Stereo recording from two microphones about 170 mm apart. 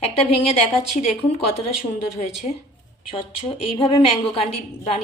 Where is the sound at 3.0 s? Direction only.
35° left (ahead or behind).